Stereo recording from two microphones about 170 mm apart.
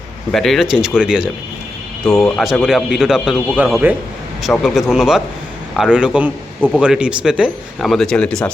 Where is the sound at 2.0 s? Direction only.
20° left (ahead or behind).